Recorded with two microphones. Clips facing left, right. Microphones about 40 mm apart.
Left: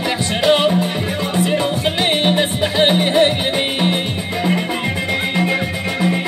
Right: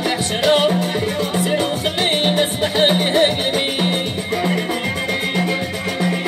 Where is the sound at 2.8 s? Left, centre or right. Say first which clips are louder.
Left 1 dB; centre.